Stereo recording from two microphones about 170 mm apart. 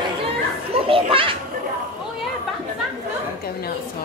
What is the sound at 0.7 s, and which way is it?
Children playing, 30° right (ahead or behind).